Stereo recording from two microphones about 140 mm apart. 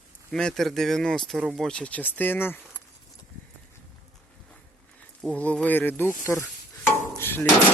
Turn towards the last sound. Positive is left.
turn(degrees=15)  # may be behind; listen again after turning